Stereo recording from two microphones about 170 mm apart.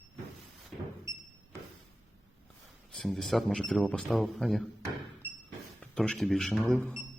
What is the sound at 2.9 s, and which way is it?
Speech, centre (ahead or behind).